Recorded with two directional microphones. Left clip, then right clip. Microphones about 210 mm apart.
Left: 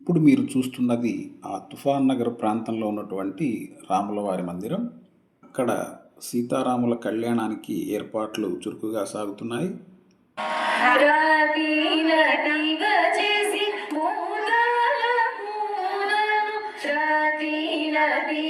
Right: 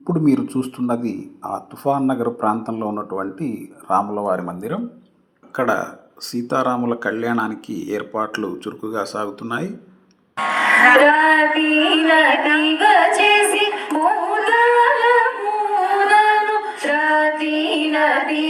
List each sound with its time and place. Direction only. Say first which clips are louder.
0.1 s speech: right 1 dB; 10° right (ahead or behind)
5.5 s speech: right 6 dB; 5° right (ahead or behind)
10.8 s a sound: right 7 dB; 55° right (ahead or behind)